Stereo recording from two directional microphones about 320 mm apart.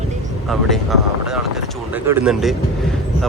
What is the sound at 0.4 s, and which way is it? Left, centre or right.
Speech, centre.